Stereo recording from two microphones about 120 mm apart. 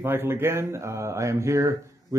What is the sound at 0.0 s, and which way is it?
Speech, 20° right (ahead or behind).